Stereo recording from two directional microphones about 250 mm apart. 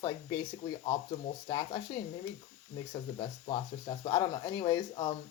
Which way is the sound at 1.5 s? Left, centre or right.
Centre.